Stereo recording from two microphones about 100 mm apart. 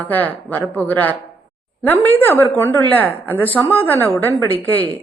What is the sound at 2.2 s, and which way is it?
Speech, 20° left (ahead or behind).